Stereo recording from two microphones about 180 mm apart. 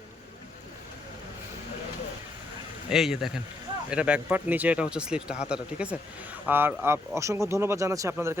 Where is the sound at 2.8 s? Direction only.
5° right (ahead or behind).